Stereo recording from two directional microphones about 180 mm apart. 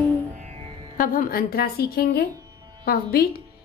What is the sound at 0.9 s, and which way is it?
A woman's voice, 50° left (ahead or behind).